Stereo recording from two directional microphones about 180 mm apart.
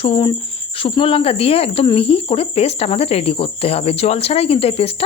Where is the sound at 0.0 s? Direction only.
30° left (ahead or behind).